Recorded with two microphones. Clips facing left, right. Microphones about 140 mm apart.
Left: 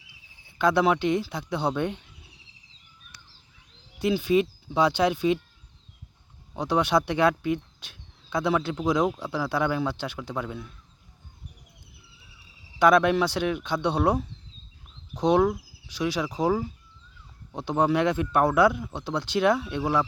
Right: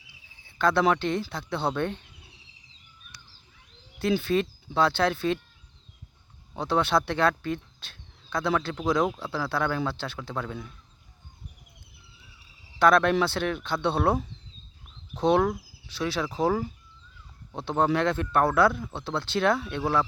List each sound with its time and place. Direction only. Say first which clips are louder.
0.4 s speech: left 1 dB; 15° left (ahead or behind)
4.2 s speech: left 3 dB; 15° left (ahead or behind)
6.6 s speech: left 1 dB; 15° left (ahead or behind)
12.8 s speech: left 1 dB; 15° left (ahead or behind)